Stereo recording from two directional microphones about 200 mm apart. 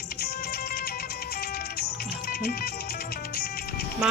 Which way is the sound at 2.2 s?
50° left (ahead or behind).